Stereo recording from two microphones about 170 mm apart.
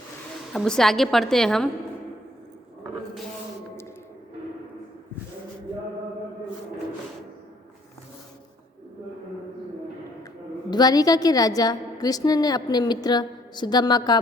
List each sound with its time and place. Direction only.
0.5 s a woman's voice: 5° left (ahead or behind)
10.7 s a woman's voice: 25° left (ahead or behind)